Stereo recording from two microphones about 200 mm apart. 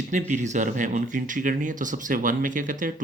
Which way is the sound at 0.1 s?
40° right (ahead or behind).